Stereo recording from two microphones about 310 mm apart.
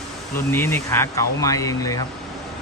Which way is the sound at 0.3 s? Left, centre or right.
Centre.